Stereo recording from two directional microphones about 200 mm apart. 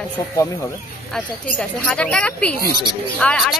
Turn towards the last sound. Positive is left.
turn(degrees=5)  # may be behind; listen again after turning